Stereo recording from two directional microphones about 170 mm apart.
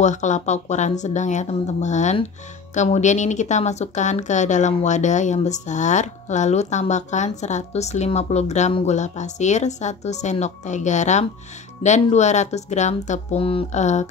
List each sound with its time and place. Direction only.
0.0 s speech: 45° left (ahead or behind)